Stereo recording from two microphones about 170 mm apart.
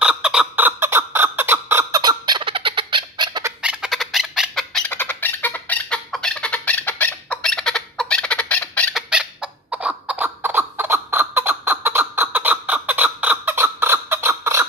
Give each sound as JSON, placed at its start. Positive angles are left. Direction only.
{"t": 0.0, "sound": "fowl", "side_deg": -5}
{"t": 3.6, "sound": "bird", "side_deg": -5}
{"t": 9.1, "sound": "a sound", "side_deg": -5}